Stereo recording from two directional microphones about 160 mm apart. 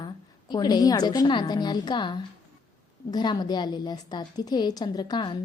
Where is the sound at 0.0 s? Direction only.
25° left (ahead or behind).